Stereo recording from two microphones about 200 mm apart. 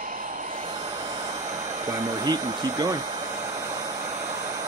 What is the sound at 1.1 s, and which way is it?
Jet engine, 35° right (ahead or behind).